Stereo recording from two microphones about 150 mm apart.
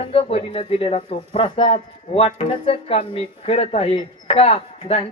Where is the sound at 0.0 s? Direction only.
40° left (ahead or behind).